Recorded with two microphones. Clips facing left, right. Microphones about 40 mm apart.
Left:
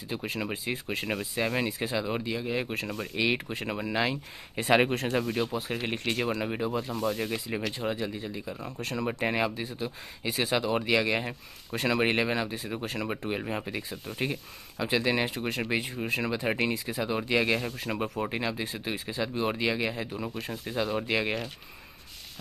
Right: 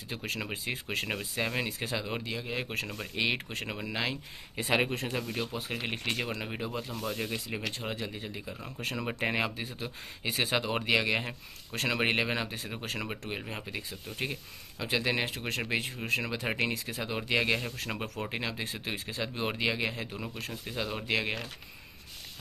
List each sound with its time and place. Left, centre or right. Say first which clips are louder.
0.1 s speech: left 3 dB; centre
4.6 s speech: left 6 dB; left
5.5 s speech: left 4 dB; centre
8.8 s speech: left 2 dB; centre
12.0 s speech: left 1 dB; centre
13.4 s speech: left 6 dB; centre
14.1 s speech: left 4 dB; centre
18.3 s speech: left 3 dB; centre